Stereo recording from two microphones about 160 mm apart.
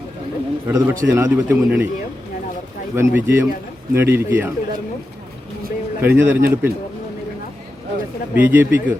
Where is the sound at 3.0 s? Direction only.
15° right (ahead or behind).